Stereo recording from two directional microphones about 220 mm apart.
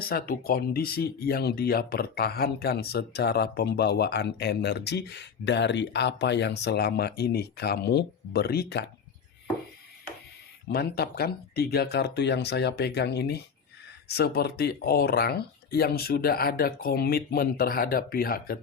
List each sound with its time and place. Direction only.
0.0 s speech: 40° left (ahead or behind)
10.7 s speech: 45° left (ahead or behind)